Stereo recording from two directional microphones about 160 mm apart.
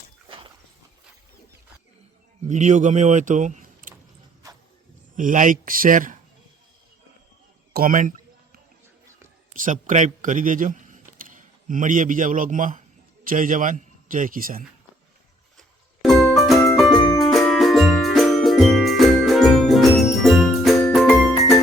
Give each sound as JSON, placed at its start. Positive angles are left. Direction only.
{"t": 2.4, "sound": "a man's voice", "side_deg": -50}
{"t": 5.1, "sound": "speech", "side_deg": -55}
{"t": 7.7, "sound": "a sound", "side_deg": -65}
{"t": 9.5, "sound": "a man's voice", "side_deg": -55}
{"t": 15.5, "sound": "music", "side_deg": 0}